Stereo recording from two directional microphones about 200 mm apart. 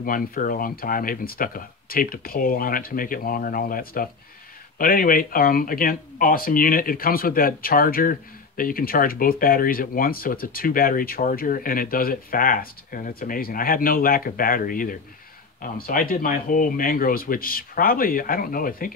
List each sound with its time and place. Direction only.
0.0 s speech: 45° left (ahead or behind)